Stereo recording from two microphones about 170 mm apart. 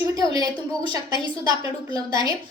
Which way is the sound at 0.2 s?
20° right (ahead or behind).